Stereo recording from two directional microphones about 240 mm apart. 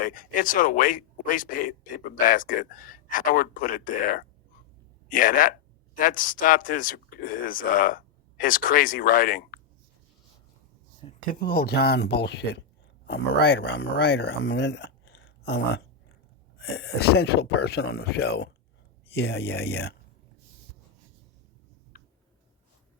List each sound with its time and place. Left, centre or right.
0.0 s speech: left
11.3 s speech: left